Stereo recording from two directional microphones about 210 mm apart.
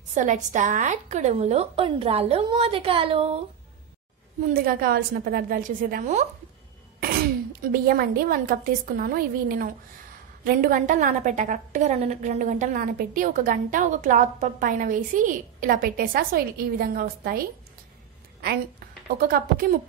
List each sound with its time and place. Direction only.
0.1 s a woman's voice: 35° right (ahead or behind)
4.6 s a woman's voice: 45° right (ahead or behind)
7.6 s a woman's voice: 45° right (ahead or behind)
19.1 s a woman's voice: 45° right (ahead or behind)